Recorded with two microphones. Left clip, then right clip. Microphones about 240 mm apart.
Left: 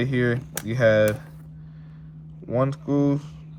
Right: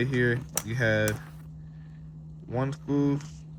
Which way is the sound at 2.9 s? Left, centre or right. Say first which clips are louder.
Left 3 dB; left.